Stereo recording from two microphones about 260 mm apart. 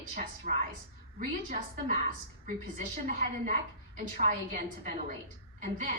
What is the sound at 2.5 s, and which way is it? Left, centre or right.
A woman's voice, right.